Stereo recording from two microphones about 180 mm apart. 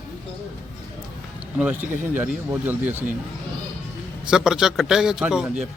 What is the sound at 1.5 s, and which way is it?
Speech, 10° right (ahead or behind).